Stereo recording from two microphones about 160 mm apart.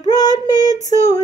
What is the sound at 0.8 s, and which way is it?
Female singing, 45° left (ahead or behind).